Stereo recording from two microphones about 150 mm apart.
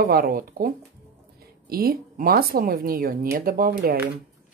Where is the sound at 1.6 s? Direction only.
90° right.